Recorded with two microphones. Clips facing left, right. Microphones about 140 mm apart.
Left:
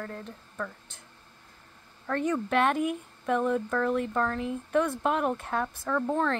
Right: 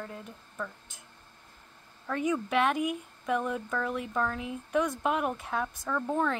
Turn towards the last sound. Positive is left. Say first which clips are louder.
# left 2 dB
turn(degrees=-5)  # may be behind; listen again after turning